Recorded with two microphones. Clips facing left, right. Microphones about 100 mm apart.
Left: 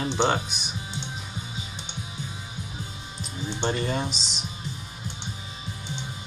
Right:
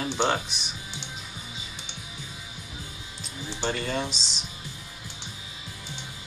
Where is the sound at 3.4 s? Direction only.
20° left (ahead or behind).